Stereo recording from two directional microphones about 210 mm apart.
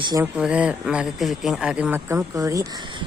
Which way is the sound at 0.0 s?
20° right (ahead or behind).